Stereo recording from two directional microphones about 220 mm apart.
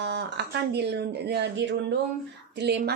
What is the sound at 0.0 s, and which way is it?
A woman's voice, 50° right (ahead or behind).